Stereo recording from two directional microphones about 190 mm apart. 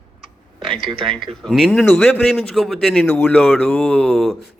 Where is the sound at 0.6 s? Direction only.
Centre (ahead or behind).